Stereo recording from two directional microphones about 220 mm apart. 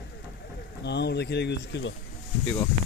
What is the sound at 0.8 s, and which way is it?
Speech, 50° left (ahead or behind).